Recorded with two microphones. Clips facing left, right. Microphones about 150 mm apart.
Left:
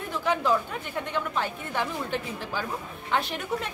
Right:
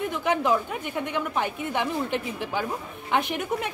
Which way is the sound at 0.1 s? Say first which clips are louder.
Left 1 dB; 15° right (ahead or behind).